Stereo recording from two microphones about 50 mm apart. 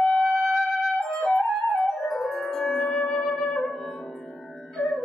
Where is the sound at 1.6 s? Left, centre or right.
Centre.